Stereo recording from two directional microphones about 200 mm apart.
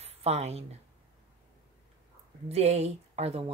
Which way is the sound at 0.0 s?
30° right (ahead or behind).